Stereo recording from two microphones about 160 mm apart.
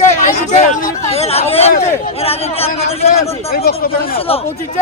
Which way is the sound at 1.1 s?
40° left (ahead or behind).